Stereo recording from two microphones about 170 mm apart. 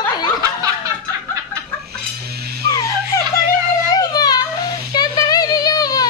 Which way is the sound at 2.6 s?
20° left (ahead or behind).